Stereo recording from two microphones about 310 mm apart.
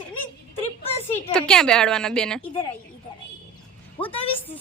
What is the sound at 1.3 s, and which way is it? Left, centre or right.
A woman's voice, centre.